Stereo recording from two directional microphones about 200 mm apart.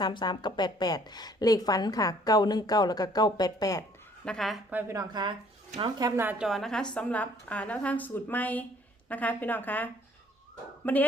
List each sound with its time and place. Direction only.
0.0 s a woman's voice: 20° left (ahead or behind)
4.3 s a woman's voice: centre (ahead or behind)